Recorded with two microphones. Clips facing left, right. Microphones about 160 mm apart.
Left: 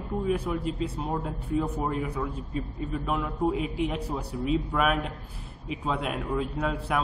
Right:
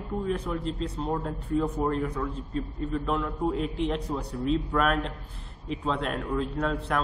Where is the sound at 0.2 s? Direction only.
10° left (ahead or behind).